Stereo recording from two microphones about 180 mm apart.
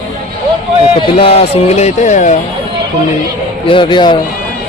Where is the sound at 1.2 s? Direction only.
35° left (ahead or behind).